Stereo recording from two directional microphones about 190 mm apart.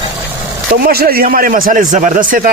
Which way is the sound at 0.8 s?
55° right (ahead or behind).